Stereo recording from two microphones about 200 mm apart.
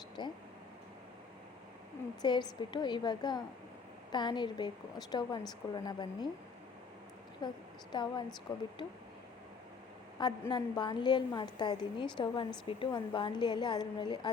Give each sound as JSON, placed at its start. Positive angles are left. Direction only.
{"t": 0.2, "sound": "a woman's voice", "side_deg": 20}
{"t": 2.2, "sound": "a woman's voice", "side_deg": 20}
{"t": 7.4, "sound": "a woman's voice", "side_deg": 20}
{"t": 10.2, "sound": "a woman's voice", "side_deg": 20}